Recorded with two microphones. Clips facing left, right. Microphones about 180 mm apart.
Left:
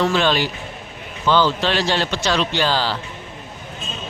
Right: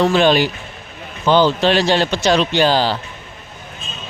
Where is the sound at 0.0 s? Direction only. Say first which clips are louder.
Right 5 dB; 15° right (ahead or behind).